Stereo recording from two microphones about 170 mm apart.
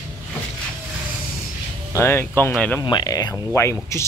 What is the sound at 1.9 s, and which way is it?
Speech, 15° left (ahead or behind).